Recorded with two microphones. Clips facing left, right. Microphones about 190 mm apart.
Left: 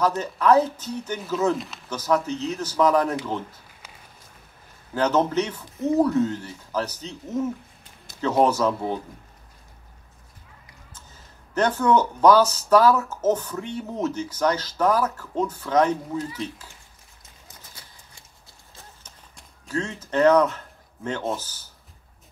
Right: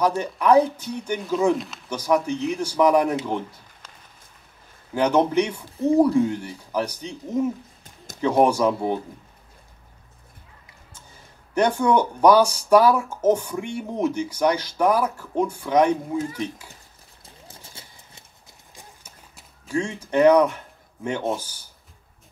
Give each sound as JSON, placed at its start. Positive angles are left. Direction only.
{"t": 0.0, "sound": "speech", "side_deg": -10}
{"t": 1.6, "sound": "speech", "side_deg": 0}
{"t": 1.9, "sound": "speech", "side_deg": -10}
{"t": 4.9, "sound": "speech", "side_deg": -10}
{"t": 11.5, "sound": "speech", "side_deg": -10}
{"t": 16.2, "sound": "speech", "side_deg": -45}
{"t": 17.5, "sound": "clip-clop", "side_deg": -30}
{"t": 18.8, "sound": "clip-clop", "side_deg": -10}